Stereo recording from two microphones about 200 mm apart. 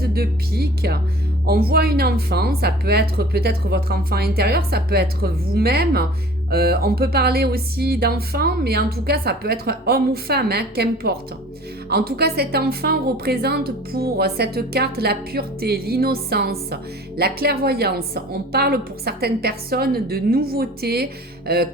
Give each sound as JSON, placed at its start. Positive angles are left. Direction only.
{"t": 0.0, "sound": "a woman's voice", "side_deg": -50}